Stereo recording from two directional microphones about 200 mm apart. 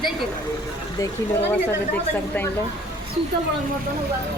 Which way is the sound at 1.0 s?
10° left (ahead or behind).